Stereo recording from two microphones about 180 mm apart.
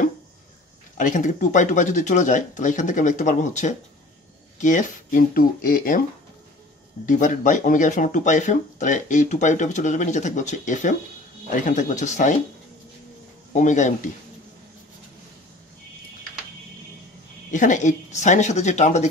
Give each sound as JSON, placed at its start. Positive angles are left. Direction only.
{"t": 0.9, "sound": "speech", "side_deg": 45}
{"t": 7.1, "sound": "speech", "side_deg": 45}
{"t": 13.5, "sound": "speech", "side_deg": 40}
{"t": 17.5, "sound": "speech", "side_deg": 45}